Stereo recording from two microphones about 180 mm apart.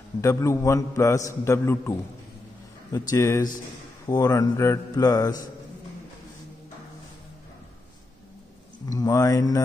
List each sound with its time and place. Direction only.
0.2 s a man's voice: 15° left (ahead or behind)
8.8 s speech: 20° left (ahead or behind)